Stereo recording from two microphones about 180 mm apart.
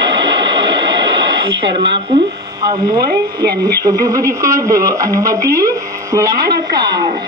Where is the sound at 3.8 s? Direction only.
20° right (ahead or behind).